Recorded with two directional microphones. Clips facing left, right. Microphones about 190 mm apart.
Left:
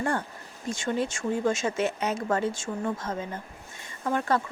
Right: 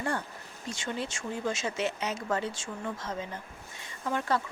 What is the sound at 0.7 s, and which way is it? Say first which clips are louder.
Speech: left 7 dB; 50° left (ahead or behind).